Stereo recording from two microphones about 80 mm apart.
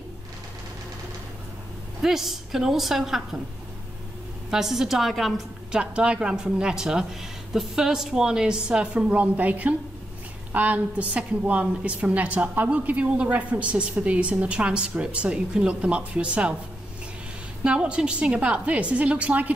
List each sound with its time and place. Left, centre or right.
2.0 s a woman's voice: centre
4.5 s a woman's voice: centre
5.8 s a woman's voice: centre
17.6 s a woman's voice: centre